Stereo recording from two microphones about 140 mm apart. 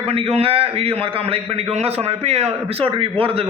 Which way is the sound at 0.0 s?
45° right (ahead or behind).